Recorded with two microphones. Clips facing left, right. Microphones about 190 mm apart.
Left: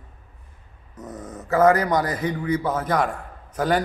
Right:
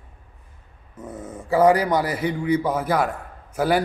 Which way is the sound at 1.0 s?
10° right (ahead or behind).